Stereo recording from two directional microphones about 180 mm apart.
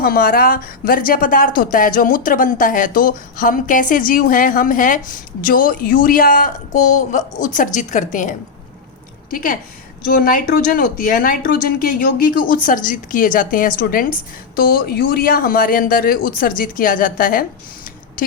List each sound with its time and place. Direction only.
0.0 s speech: 55° left (ahead or behind)